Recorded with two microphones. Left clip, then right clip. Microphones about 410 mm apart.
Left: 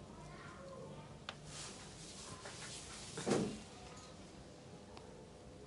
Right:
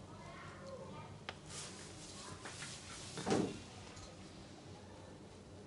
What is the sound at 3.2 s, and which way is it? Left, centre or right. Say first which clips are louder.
Vehicle: even; centre.